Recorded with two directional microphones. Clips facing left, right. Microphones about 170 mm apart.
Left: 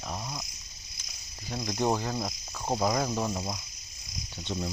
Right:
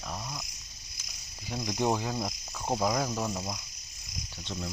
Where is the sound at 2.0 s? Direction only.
5° right (ahead or behind).